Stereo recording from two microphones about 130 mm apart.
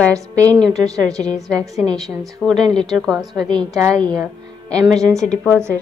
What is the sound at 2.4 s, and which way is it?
A woman's voice, centre (ahead or behind).